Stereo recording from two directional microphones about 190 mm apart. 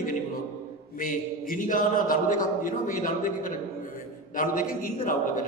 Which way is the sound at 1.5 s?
45° left (ahead or behind).